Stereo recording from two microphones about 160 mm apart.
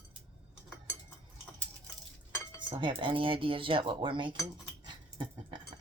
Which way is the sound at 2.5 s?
35° right (ahead or behind).